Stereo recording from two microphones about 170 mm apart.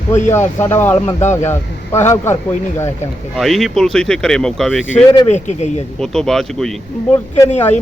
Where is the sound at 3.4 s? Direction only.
Centre (ahead or behind).